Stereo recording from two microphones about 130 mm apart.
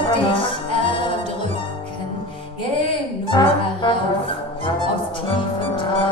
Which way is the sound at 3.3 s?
35° left (ahead or behind).